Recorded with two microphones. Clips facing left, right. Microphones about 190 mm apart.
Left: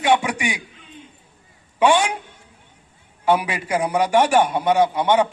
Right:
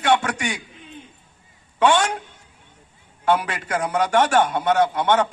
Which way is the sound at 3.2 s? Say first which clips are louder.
Left 1 dB; 10° left (ahead or behind).